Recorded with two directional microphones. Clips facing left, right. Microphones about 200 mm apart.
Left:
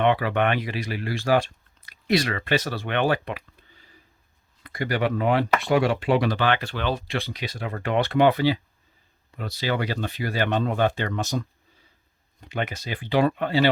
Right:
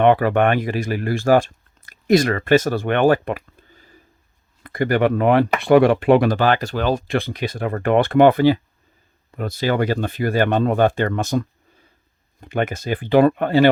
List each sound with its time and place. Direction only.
0.0 s speech: 50° right (ahead or behind)